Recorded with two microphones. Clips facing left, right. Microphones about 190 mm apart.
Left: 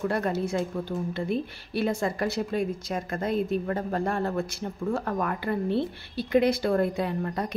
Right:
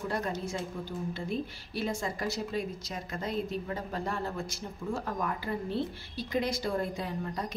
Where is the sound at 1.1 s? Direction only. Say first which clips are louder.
Left 6 dB; 60° left (ahead or behind).